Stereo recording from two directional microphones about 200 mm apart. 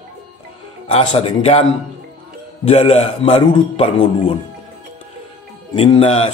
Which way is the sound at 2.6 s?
30° left (ahead or behind).